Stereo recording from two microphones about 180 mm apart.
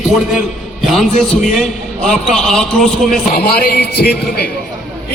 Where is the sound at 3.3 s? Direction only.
60° left (ahead or behind).